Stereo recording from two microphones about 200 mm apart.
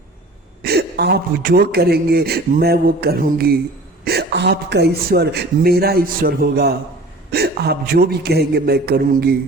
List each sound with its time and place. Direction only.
0.6 s speech: 55° right (ahead or behind)